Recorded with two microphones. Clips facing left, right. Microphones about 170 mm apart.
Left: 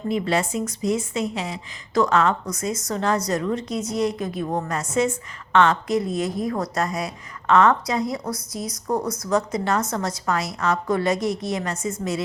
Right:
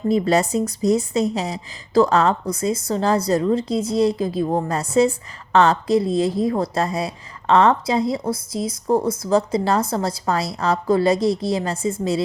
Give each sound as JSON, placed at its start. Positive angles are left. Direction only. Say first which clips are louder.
{"t": 0.1, "sound": "a woman's voice", "louder": "right 5 dB", "side_deg": -40}